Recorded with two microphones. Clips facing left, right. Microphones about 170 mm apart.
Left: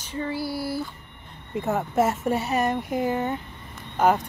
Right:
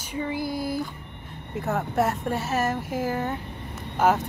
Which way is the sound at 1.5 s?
Centre (ahead or behind).